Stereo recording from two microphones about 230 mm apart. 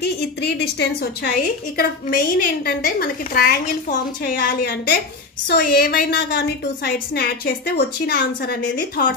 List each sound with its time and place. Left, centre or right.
0.0 s a woman's voice: left